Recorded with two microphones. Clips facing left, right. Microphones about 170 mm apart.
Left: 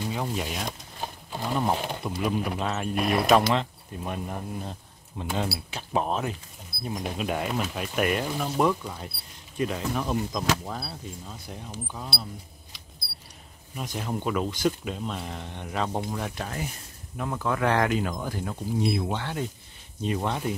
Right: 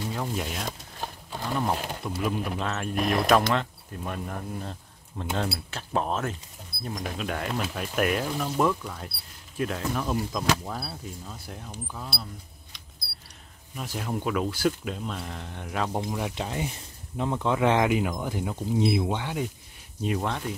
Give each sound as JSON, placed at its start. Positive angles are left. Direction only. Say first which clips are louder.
{"t": 0.1, "sound": "speech", "louder": "left 1 dB", "side_deg": 5}
{"t": 13.8, "sound": "speech", "louder": "even", "side_deg": 0}
{"t": 16.3, "sound": "speech", "louder": "right 2 dB", "side_deg": -20}
{"t": 20.0, "sound": "speech", "louder": "even", "side_deg": 0}